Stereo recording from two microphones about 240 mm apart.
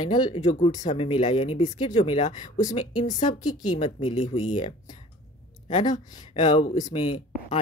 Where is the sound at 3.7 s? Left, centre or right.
Centre.